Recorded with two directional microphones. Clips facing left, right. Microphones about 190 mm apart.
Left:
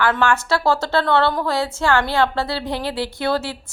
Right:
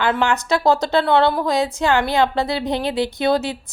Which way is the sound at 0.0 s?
20° right (ahead or behind).